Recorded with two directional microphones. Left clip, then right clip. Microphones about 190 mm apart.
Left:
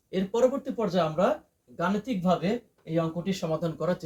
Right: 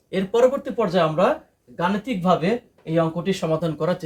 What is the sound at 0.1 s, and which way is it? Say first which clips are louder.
Speech: right 7 dB; 25° right (ahead or behind).